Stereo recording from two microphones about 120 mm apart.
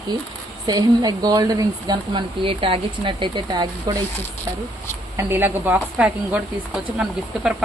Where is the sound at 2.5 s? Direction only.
50° right (ahead or behind).